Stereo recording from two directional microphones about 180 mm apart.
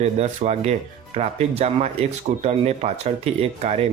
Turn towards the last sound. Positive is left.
turn(degrees=-35)  # may be behind; listen again after turning